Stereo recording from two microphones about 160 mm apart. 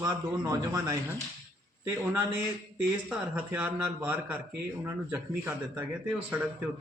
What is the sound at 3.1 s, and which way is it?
Speech, 10° right (ahead or behind).